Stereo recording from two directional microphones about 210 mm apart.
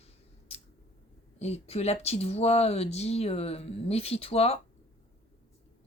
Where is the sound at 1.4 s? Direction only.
30° left (ahead or behind).